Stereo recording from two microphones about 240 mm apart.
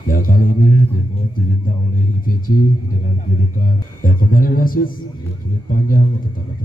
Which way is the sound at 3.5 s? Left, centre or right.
Left.